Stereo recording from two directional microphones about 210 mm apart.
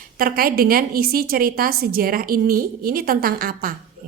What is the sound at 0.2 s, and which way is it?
A woman's voice, 45° right (ahead or behind).